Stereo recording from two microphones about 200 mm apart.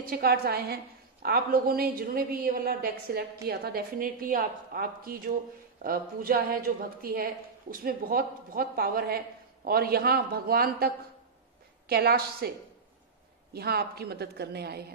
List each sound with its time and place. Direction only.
0.0 s a woman's voice: 50° right (ahead or behind)
11.9 s a woman's voice: 50° right (ahead or behind)
13.5 s a woman's voice: 50° right (ahead or behind)